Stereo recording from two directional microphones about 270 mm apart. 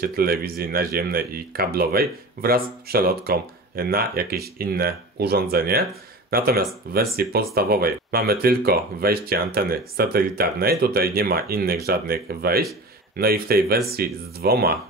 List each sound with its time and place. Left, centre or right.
0.0 s speech: right